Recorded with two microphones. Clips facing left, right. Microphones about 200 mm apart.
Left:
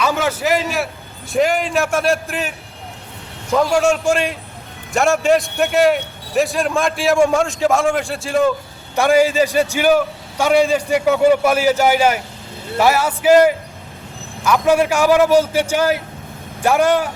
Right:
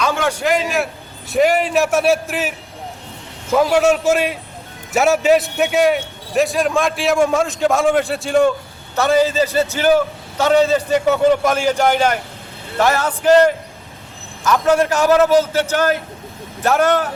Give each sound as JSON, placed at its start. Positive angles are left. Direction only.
{"t": 0.0, "sound": "a man's voice", "side_deg": 5}
{"t": 3.5, "sound": "a man's voice", "side_deg": -5}
{"t": 9.0, "sound": "a man's voice", "side_deg": 10}